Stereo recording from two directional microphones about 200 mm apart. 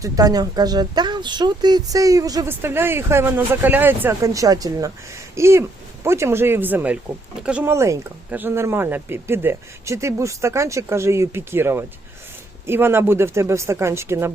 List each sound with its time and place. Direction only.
0.0 s speech: 20° right (ahead or behind)